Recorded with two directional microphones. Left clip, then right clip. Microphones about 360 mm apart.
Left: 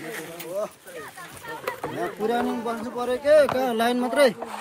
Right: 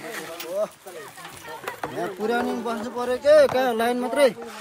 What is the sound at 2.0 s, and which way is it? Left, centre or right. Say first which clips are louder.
Speech: right 1 dB; right.